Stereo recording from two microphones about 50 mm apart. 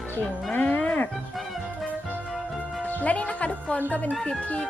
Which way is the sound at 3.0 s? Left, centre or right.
Left.